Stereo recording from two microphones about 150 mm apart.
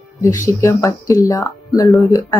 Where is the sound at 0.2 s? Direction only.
20° left (ahead or behind).